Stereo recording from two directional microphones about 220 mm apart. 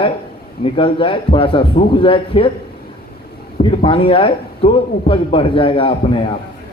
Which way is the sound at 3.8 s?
25° left (ahead or behind).